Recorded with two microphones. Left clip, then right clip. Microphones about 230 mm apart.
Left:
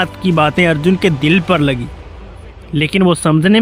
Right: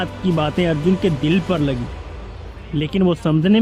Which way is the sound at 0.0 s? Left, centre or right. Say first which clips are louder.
Left 7 dB; left.